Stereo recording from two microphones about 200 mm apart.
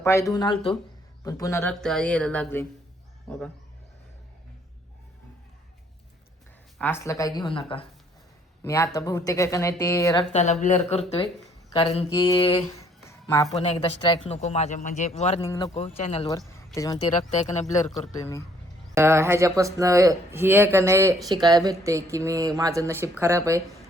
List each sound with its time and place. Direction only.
0.0 s a woman's voice: 15° left (ahead or behind)
1.8 s a woman's voice: 5° left (ahead or behind)
6.7 s a woman's voice: 10° left (ahead or behind); by 7.9 s 25° left (ahead or behind)
8.6 s a woman's voice: 15° left (ahead or behind)
10.3 s speech: 35° left (ahead or behind)
12.8 s a sound: 15° left (ahead or behind)
13.6 s speech: 30° left (ahead or behind)
15.4 s speech: 20° left (ahead or behind)
15.7 s speech: 30° left (ahead or behind)
16.7 s a woman's voice: 15° left (ahead or behind)
17.3 s speech: 35° left (ahead or behind)
18.2 s a woman's voice: 15° left (ahead or behind)
18.9 s speech: 15° right (ahead or behind)